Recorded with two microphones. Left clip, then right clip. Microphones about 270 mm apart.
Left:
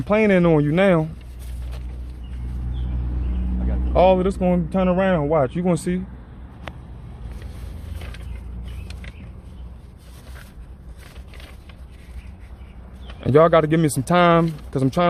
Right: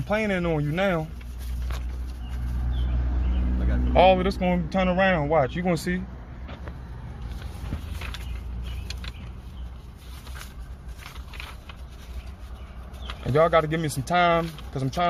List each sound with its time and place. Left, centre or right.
0.1 s speech: left
3.9 s speech: left
13.2 s speech: left